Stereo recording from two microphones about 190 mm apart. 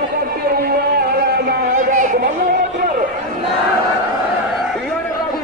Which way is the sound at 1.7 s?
45° right (ahead or behind).